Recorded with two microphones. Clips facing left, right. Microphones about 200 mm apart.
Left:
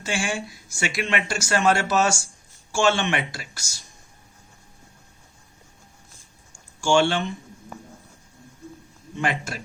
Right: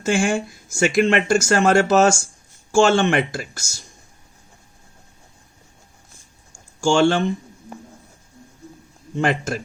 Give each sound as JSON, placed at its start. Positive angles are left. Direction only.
{"t": 0.0, "sound": "speech", "side_deg": -50}
{"t": 6.8, "sound": "speech", "side_deg": -45}
{"t": 9.1, "sound": "speech", "side_deg": -45}